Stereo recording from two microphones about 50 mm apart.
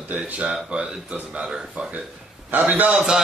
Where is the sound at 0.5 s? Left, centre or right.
Centre.